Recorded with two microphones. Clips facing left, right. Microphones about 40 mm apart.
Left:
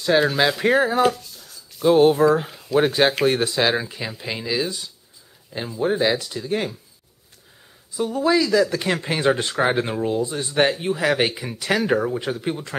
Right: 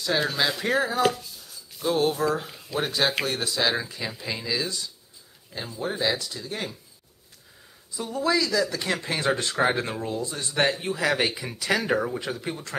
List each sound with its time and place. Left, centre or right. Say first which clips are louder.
0.1 s speech: left 6 dB; left
1.0 s a sound: left 4 dB; centre
1.9 s speech: left 9 dB; left
7.9 s speech: left 5 dB; centre